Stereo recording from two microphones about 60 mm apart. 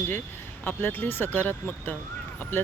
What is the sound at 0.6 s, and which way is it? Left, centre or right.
Speech, left.